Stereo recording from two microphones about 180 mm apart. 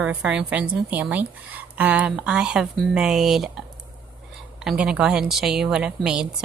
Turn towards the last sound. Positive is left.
turn(degrees=-5)  # may be behind; listen again after turning